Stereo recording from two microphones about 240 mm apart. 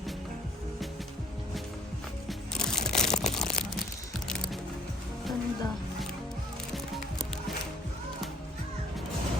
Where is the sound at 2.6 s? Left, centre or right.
Centre.